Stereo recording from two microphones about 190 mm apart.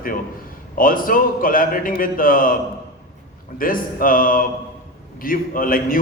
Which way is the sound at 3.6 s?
45° left (ahead or behind).